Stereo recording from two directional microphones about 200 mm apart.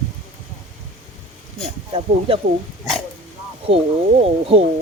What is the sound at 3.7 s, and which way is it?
Speech, 30° right (ahead or behind).